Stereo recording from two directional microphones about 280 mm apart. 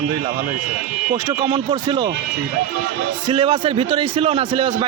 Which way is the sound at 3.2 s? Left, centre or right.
Centre.